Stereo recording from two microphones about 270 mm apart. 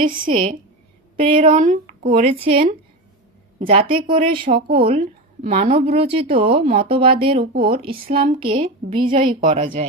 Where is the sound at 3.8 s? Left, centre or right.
Centre.